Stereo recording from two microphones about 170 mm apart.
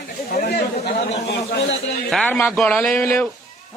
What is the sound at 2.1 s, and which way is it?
A man's voice, 5° left (ahead or behind).